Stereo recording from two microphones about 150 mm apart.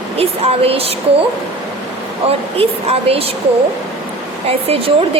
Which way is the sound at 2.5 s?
40° right (ahead or behind).